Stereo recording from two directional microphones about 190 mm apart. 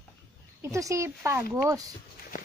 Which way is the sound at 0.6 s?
15° right (ahead or behind).